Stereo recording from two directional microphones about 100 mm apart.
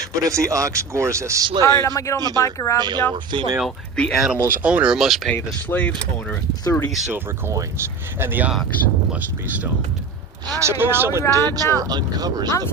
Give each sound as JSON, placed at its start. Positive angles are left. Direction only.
{"t": 0.3, "sound": "speech", "side_deg": -30}
{"t": 1.6, "sound": "speech", "side_deg": 30}
{"t": 2.7, "sound": "speech", "side_deg": -45}
{"t": 3.9, "sound": "speech", "side_deg": 10}
{"t": 4.4, "sound": "speech", "side_deg": -10}
{"t": 5.6, "sound": "speech", "side_deg": 15}
{"t": 6.7, "sound": "speech", "side_deg": 30}
{"t": 7.1, "sound": "speech", "side_deg": -25}
{"t": 10.5, "sound": "speech", "side_deg": -25}
{"t": 11.3, "sound": "speech", "side_deg": -35}